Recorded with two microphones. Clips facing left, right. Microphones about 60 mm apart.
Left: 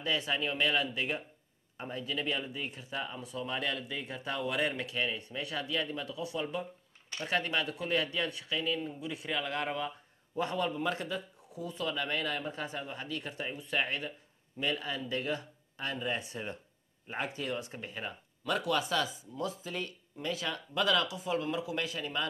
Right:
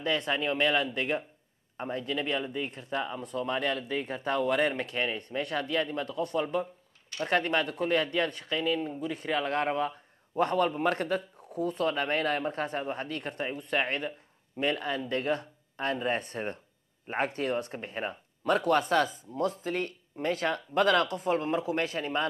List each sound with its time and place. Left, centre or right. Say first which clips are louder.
0.0 s a man's voice: right 4 dB; right
6.4 s a man's voice: right 6 dB; right